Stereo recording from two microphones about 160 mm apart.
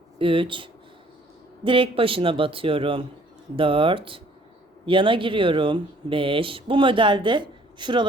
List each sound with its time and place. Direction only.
0.2 s speech: 35° right (ahead or behind)